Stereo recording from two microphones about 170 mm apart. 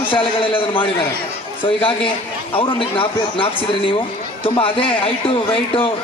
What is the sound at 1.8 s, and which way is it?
Speech, 30° left (ahead or behind).